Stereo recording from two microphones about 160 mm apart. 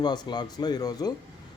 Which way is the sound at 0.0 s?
25° left (ahead or behind).